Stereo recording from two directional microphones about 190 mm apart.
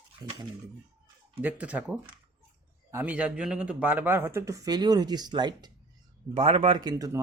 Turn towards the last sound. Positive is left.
turn(degrees=-20)  # may be behind; listen again after turning